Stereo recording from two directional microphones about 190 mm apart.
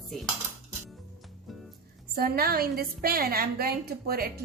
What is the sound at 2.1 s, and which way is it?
A woman's voice, 50° right (ahead or behind).